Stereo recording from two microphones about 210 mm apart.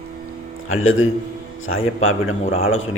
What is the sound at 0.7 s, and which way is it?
A man's voice, 70° left (ahead or behind).